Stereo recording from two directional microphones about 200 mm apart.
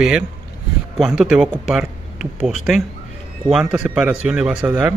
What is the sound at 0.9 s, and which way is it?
A man's voice, 5° right (ahead or behind).